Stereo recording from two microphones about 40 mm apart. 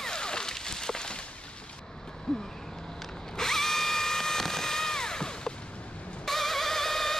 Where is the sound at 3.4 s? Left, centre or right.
Centre.